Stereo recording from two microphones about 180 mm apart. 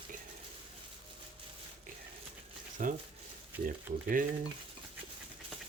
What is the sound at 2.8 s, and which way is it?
Speech, 45° right (ahead or behind).